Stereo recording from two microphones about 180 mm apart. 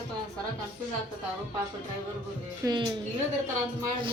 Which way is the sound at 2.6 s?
25° right (ahead or behind).